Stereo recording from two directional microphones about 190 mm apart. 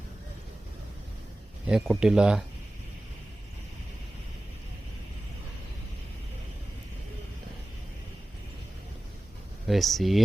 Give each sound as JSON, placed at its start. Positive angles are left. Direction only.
{"t": 1.6, "sound": "speech", "side_deg": -5}
{"t": 9.6, "sound": "speech", "side_deg": 0}